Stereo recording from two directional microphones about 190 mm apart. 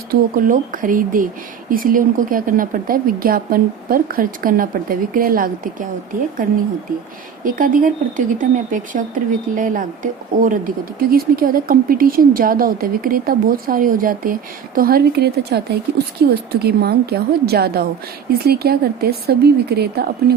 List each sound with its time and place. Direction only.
0.1 s speech: 45° right (ahead or behind)
7.4 s speech: 45° right (ahead or behind)